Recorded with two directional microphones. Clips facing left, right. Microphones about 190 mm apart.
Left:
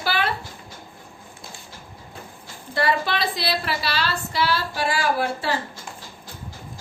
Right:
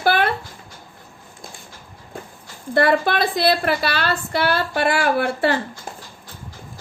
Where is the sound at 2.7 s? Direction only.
55° right (ahead or behind).